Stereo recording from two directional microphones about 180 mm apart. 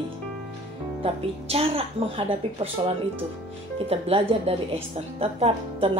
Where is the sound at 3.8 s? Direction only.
35° right (ahead or behind).